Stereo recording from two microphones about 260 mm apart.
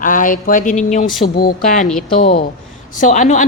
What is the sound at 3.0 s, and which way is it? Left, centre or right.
Speech, left.